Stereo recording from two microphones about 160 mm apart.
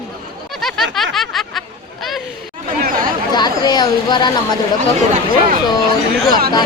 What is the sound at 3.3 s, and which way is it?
Speech, 25° left (ahead or behind).